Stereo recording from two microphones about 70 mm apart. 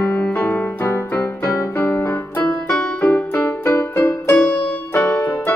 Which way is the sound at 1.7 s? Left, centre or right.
Left.